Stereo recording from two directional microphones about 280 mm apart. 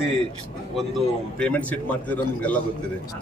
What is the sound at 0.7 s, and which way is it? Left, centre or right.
A man's voice, centre.